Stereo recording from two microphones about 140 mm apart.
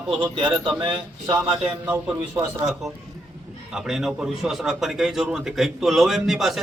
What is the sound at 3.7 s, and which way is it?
A man's voice, 5° right (ahead or behind).